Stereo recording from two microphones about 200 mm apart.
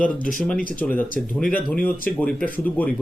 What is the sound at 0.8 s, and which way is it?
Speech, 10° left (ahead or behind).